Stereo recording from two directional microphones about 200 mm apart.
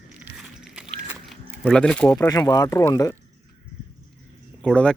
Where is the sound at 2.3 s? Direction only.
20° left (ahead or behind).